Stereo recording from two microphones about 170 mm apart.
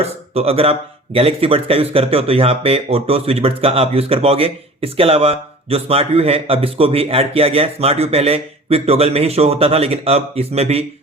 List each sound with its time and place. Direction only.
0.0 s speech: 35° right (ahead or behind)